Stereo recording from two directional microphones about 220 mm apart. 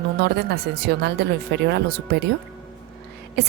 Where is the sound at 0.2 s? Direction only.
45° right (ahead or behind).